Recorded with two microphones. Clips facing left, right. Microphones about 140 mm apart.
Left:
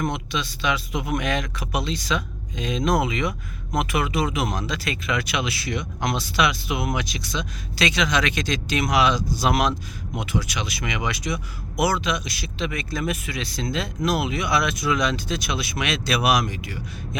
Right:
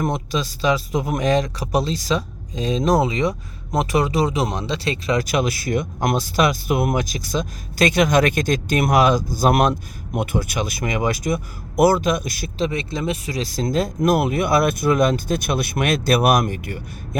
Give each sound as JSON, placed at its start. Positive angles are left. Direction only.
{"t": 0.0, "sound": "a man's voice", "side_deg": -40}